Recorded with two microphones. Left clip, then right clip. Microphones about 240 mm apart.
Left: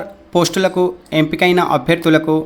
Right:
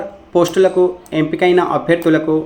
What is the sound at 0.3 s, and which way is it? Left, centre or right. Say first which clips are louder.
Speech: right 3 dB; left.